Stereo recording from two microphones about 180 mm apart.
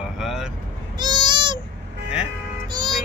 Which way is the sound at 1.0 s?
25° right (ahead or behind).